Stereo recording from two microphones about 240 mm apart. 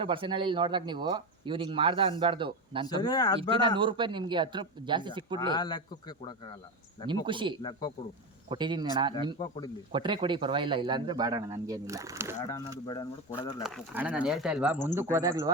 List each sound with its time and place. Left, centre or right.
0.0 s speech: right
2.8 s speech: centre
3.8 s speech: centre
5.4 s speech: centre
7.1 s speech: centre
7.6 s speech: centre
8.4 s speech: centre
12.4 s speech: centre
13.6 s speech: centre